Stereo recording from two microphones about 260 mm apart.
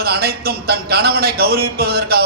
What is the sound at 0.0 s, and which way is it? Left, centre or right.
A man's voice, right.